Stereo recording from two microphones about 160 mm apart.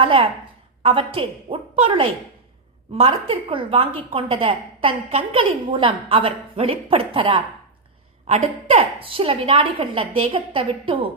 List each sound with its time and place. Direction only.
0.0 s a woman's voice: 35° right (ahead or behind)